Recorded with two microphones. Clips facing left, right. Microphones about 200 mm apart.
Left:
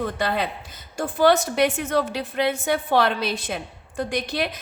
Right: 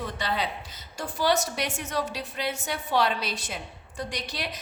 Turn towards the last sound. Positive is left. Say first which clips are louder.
# left 8 dB
turn(degrees=55)  # may be behind; listen again after turning